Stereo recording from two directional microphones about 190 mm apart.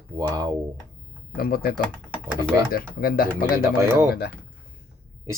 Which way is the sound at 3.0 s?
50° left (ahead or behind).